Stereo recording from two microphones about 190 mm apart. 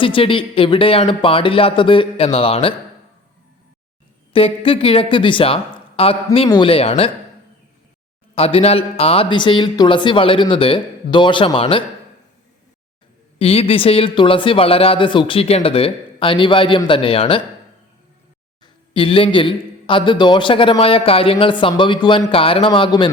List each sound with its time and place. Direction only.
0.0 s speech: 25° left (ahead or behind)
4.3 s speech: 30° left (ahead or behind)
8.4 s speech: 30° left (ahead or behind)
13.4 s speech: 30° left (ahead or behind)
18.6 s speech: 30° left (ahead or behind)